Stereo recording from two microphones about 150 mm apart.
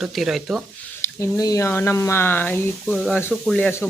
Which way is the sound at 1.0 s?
20° left (ahead or behind).